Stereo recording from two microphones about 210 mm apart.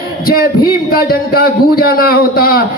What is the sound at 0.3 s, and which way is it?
A man's voice, 45° left (ahead or behind).